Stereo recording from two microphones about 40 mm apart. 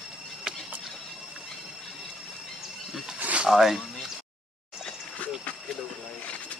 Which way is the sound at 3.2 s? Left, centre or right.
Right.